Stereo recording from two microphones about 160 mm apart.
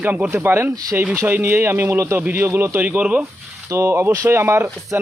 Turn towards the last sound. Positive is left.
turn(degrees=-15)  # may be behind; listen again after turning